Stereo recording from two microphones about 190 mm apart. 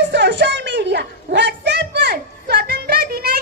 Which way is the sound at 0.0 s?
70° right (ahead or behind).